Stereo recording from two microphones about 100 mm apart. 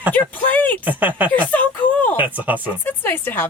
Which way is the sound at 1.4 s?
15° left (ahead or behind).